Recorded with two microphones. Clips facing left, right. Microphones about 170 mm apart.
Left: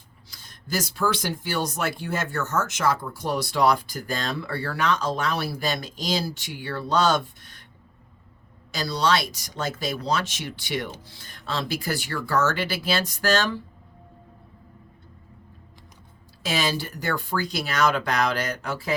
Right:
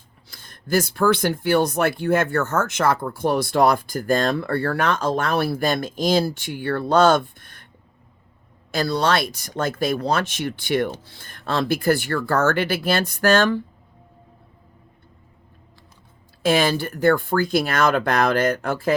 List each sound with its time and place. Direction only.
0.3 s speech: 55° right (ahead or behind)
8.7 s speech: 55° right (ahead or behind)
16.4 s speech: 55° right (ahead or behind)